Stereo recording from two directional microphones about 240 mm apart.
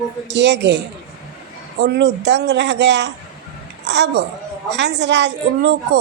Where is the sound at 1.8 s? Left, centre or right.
Right.